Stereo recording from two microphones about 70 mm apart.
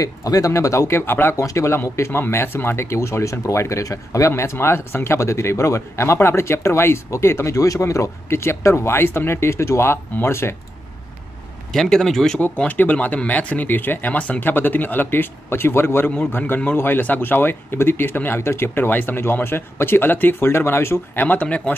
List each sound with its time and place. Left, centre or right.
0.0 s speech: left
1.3 s speech: left
1.8 s speech: left
4.3 s speech: left
11.7 s a man's voice: centre
12.4 s speech: left